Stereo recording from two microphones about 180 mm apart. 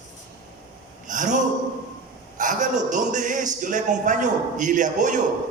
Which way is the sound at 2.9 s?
45° right (ahead or behind).